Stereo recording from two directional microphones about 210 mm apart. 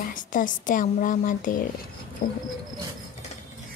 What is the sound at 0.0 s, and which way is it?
Speech, 40° left (ahead or behind).